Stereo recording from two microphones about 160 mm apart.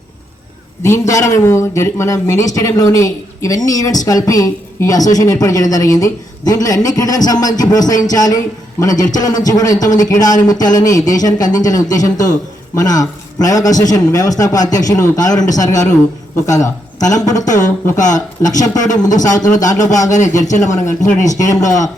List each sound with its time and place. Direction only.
0.8 s speech: 20° left (ahead or behind)
18.8 s a man's voice: 50° left (ahead or behind)
19.3 s speech: 20° left (ahead or behind)
20.1 s a man's voice: 50° left (ahead or behind)
20.6 s speech: 20° left (ahead or behind)